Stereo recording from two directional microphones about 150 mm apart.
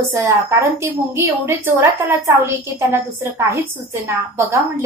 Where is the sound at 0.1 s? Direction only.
20° right (ahead or behind).